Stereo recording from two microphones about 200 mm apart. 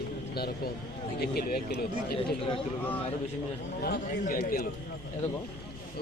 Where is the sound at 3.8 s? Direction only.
50° left (ahead or behind).